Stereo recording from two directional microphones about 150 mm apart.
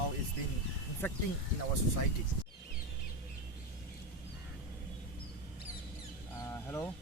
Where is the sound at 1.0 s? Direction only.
15° left (ahead or behind).